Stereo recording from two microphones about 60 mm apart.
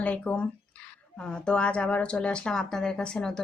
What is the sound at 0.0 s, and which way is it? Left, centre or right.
Speech, left.